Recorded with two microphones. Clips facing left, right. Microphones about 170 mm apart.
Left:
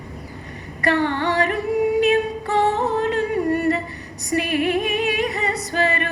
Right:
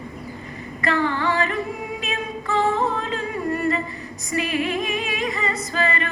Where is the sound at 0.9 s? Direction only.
65° left (ahead or behind).